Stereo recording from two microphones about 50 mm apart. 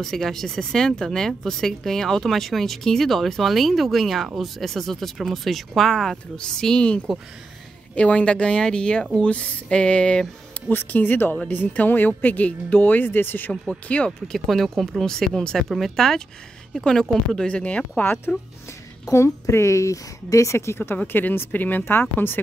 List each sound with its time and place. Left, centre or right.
0.0 s speech: centre
9.2 s speech: left
10.7 s speech: left
13.8 s speech: left
14.2 s speech: centre
17.5 s speech: left
18.0 s speech: left
19.1 s speech: left
21.1 s speech: left